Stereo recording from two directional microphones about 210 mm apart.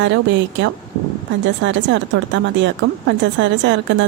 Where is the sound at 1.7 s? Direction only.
60° right (ahead or behind).